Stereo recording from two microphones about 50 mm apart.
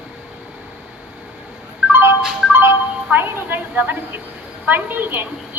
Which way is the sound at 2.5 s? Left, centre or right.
Right.